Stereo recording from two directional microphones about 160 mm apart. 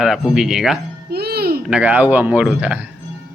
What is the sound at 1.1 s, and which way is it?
Music, 80° right.